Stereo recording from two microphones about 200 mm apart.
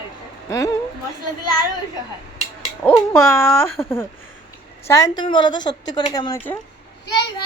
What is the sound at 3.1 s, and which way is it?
A woman's voice, 15° left (ahead or behind).